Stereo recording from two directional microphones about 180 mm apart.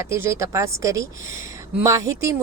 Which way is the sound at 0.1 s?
15° right (ahead or behind).